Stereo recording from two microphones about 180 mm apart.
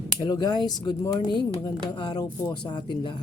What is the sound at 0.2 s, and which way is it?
Speech, 20° left (ahead or behind).